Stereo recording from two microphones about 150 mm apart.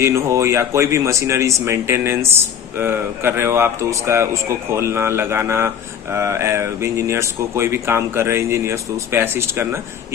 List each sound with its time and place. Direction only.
0.0 s speech: 20° right (ahead or behind)